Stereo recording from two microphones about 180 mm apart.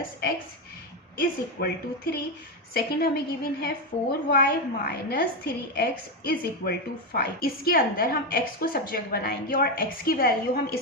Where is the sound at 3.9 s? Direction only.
40° left (ahead or behind).